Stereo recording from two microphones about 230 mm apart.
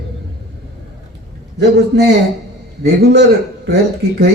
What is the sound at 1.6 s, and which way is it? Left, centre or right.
A man's voice, right.